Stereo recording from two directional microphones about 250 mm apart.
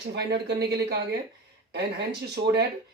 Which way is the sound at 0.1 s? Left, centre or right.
Right.